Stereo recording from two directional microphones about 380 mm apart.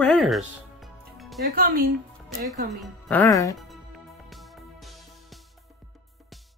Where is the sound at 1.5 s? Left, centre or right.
Right.